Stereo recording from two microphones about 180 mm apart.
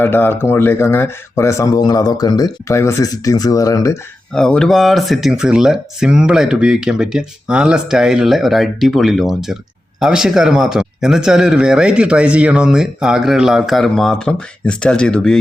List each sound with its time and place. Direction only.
0.0 s speech: 10° left (ahead or behind)
4.3 s speech: 5° left (ahead or behind)